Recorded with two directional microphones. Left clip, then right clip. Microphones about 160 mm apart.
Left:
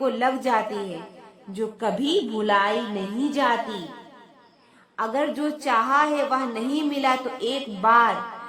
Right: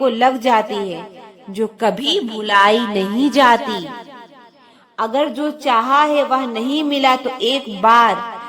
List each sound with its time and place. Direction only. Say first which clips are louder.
0.0 s a woman's voice: right 8 dB; 35° right (ahead or behind)